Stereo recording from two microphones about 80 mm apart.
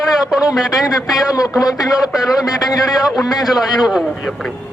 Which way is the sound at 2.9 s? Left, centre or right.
Centre.